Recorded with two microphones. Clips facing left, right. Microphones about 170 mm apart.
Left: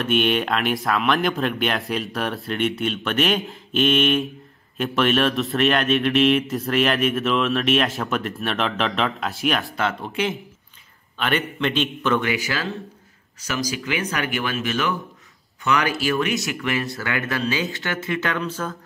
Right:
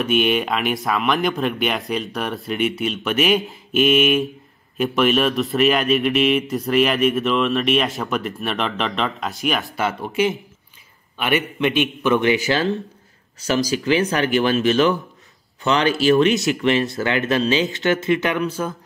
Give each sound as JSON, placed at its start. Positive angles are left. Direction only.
{"t": 0.0, "sound": "a man's voice", "side_deg": 0}